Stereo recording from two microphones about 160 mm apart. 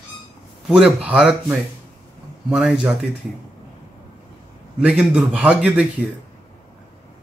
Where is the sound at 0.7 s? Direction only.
5° right (ahead or behind).